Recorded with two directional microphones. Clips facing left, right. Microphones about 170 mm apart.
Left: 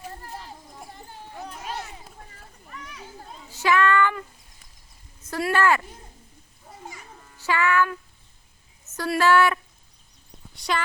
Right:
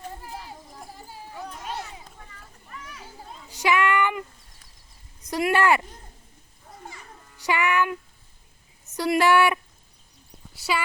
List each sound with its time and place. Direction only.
0.3 s a sound: centre (ahead or behind)
2.6 s children playing: centre (ahead or behind)
3.5 s child singing: 15° right (ahead or behind)
5.2 s speech: 15° right (ahead or behind)
7.4 s a woman's voice: 15° right (ahead or behind)
10.5 s clip-clop: 5° right (ahead or behind)